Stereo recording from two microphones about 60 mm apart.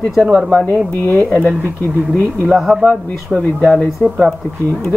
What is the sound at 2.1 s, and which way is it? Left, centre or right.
Speech, left.